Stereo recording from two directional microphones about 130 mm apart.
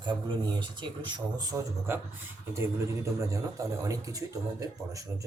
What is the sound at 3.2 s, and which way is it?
Speech, 25° right (ahead or behind).